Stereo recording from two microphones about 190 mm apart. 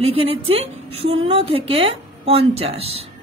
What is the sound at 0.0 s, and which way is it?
A woman's voice, 30° right (ahead or behind).